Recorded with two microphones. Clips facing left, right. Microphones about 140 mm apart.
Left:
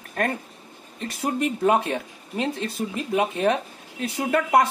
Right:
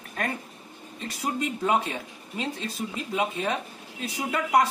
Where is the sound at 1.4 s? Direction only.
60° left (ahead or behind).